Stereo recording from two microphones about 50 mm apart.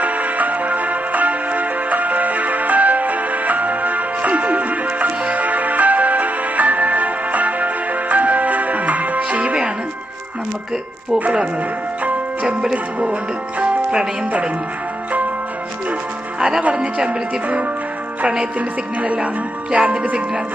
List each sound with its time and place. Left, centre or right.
0.0 s music: right
11.2 s speech: right
12.7 s speech: right
16.4 s speech: centre
18.9 s speech: right